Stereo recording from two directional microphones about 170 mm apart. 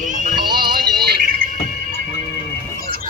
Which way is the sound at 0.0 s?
50° right (ahead or behind).